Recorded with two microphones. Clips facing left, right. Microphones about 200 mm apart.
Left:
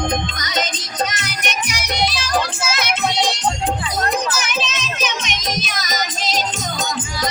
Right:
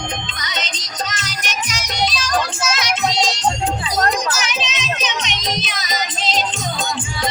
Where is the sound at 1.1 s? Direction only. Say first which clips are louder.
Left 2 dB; 60° left (ahead or behind).